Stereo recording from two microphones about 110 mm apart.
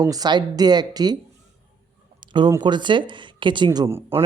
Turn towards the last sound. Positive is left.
turn(degrees=-20)  # may be behind; listen again after turning